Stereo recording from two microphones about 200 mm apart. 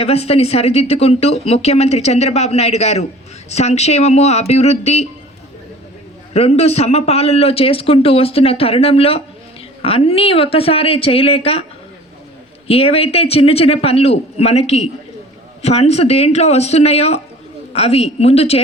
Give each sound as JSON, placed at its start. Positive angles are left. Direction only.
{"t": 0.0, "sound": "speech", "side_deg": 30}
{"t": 6.3, "sound": "a man's voice", "side_deg": 35}
{"t": 12.6, "sound": "a man's voice", "side_deg": 30}